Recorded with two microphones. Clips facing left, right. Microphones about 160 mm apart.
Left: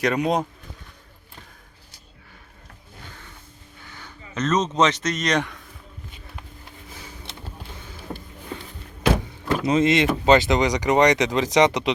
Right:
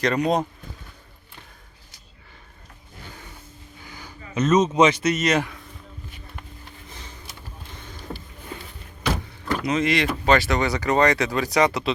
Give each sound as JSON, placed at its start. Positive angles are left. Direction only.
{"t": 0.0, "sound": "speech", "side_deg": 5}
{"t": 3.8, "sound": "speech", "side_deg": -10}
{"t": 8.1, "sound": "music", "side_deg": 15}
{"t": 9.6, "sound": "speech", "side_deg": 25}